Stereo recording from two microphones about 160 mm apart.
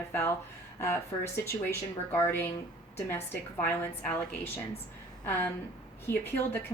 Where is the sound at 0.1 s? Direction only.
15° left (ahead or behind).